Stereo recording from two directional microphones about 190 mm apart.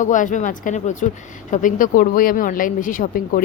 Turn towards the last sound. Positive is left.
turn(degrees=45)  # may be behind; listen again after turning